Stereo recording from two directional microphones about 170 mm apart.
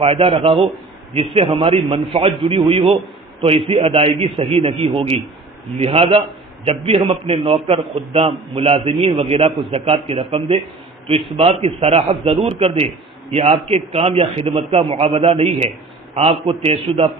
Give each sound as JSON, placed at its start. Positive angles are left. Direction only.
{"t": 0.0, "sound": "a man's voice", "side_deg": -35}